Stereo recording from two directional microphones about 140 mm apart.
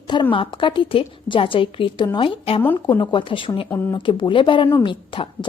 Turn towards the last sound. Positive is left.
turn(degrees=40)  # may be behind; listen again after turning